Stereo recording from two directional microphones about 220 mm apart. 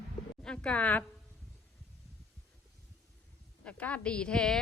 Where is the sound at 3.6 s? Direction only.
5° left (ahead or behind).